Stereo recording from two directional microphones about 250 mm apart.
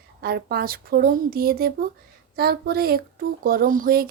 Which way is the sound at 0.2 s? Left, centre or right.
Right.